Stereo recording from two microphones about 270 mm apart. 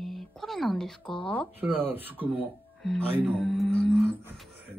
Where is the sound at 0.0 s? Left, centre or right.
Centre.